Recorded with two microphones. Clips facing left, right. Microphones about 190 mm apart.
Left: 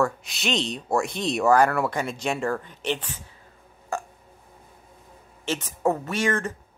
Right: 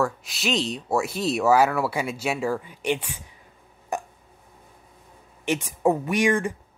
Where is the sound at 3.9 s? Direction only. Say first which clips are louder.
Right 1 dB; 20° right (ahead or behind).